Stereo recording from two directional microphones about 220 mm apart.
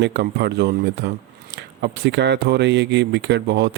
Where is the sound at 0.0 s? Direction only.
50° right (ahead or behind).